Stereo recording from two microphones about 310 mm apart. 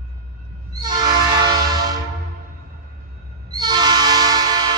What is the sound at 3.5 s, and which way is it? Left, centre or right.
Train, centre.